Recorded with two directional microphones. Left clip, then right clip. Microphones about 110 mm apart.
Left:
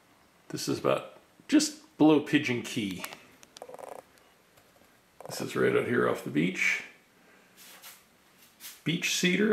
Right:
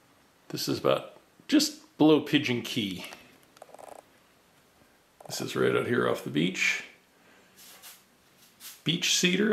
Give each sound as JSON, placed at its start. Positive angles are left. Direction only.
{"t": 0.5, "sound": "speech", "side_deg": 0}
{"t": 5.3, "sound": "speech", "side_deg": -10}
{"t": 8.8, "sound": "speech", "side_deg": -5}